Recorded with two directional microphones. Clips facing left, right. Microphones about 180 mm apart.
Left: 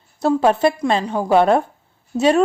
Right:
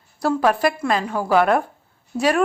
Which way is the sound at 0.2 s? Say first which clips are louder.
Left 3 dB; 25° left (ahead or behind).